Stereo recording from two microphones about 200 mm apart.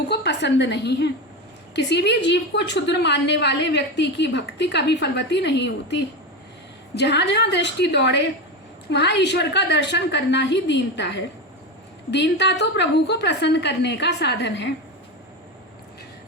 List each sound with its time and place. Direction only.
0.1 s a woman's voice: 60° left (ahead or behind)